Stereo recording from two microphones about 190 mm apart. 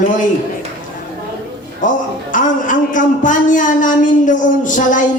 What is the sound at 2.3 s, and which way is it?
Speech, 45° left (ahead or behind).